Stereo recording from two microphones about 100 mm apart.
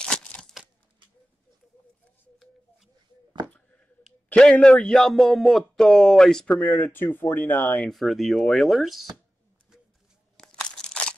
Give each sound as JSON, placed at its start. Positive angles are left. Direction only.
{"t": 0.0, "sound": "a sound", "side_deg": 10}
{"t": 4.3, "sound": "speech", "side_deg": 10}
{"t": 6.6, "sound": "speech", "side_deg": 15}
{"t": 7.9, "sound": "speech", "side_deg": 0}
{"t": 10.3, "sound": "crunch", "side_deg": 10}